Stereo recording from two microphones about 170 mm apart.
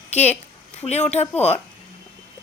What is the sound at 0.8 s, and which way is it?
Speech, 40° left (ahead or behind).